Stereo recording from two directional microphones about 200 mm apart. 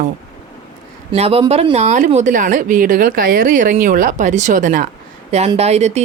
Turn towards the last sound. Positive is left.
turn(degrees=-35)  # may be behind; listen again after turning